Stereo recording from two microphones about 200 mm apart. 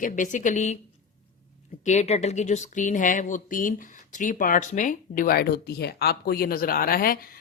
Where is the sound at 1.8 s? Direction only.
35° left (ahead or behind).